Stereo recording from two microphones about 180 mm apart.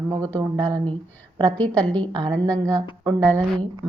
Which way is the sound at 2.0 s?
25° right (ahead or behind).